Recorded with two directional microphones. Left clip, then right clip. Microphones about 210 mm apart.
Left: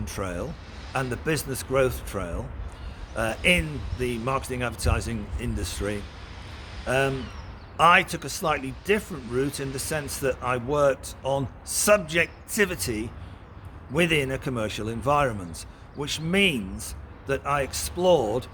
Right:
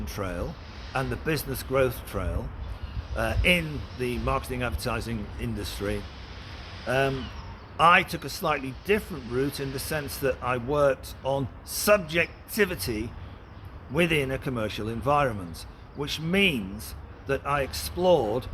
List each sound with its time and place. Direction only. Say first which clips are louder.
0.0 s speech: left 1 dB; 15° left (ahead or behind)